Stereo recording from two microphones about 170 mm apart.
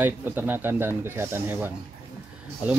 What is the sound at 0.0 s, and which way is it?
Speech, 10° right (ahead or behind).